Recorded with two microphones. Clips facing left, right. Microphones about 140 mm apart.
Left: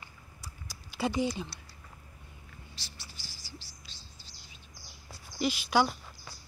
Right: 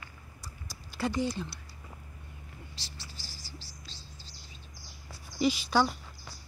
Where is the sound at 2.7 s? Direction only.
90° right.